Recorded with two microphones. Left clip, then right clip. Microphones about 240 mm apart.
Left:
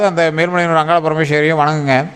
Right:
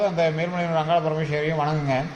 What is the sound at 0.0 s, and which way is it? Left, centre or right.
A man's voice, left.